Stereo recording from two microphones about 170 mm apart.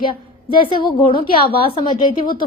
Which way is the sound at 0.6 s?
30° left (ahead or behind).